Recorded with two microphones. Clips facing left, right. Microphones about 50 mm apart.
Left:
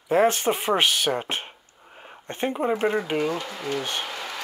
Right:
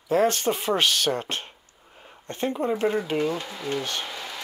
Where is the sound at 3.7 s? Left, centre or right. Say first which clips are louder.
Left 1 dB; left.